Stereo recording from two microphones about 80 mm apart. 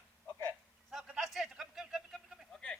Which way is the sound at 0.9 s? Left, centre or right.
Centre.